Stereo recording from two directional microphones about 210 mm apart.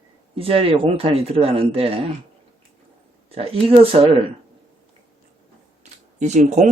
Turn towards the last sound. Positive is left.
turn(degrees=-35)  # may be behind; listen again after turning